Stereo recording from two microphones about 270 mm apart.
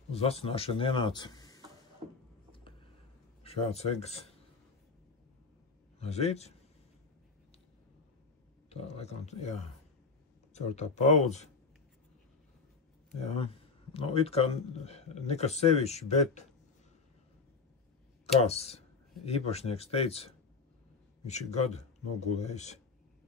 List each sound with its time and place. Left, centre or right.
0.1 s speech: left
2.5 s a sound: centre
3.4 s speech: left
5.9 s a man's voice: left
8.6 s speech: left
13.9 s speech: left
18.2 s speech: left